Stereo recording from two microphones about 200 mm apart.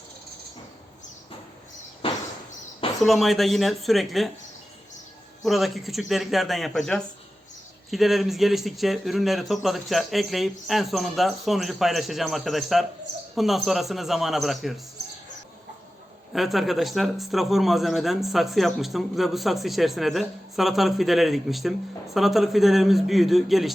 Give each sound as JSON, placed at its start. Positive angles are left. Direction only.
{"t": 3.0, "sound": "speech", "side_deg": 0}
{"t": 5.4, "sound": "speech", "side_deg": 0}
{"t": 16.3, "sound": "speech", "side_deg": 0}